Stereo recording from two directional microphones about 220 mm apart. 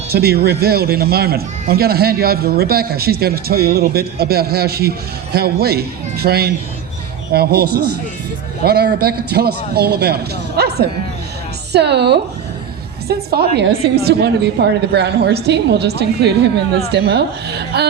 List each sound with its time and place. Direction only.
0.1 s speech: 45° right (ahead or behind)